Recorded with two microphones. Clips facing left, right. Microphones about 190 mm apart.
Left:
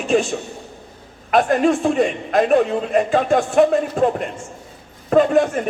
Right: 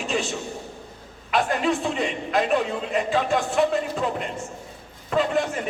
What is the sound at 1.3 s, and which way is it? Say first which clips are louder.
A man's voice: left 7 dB; 50° left (ahead or behind).